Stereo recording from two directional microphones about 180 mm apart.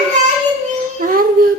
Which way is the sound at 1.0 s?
50° right (ahead or behind).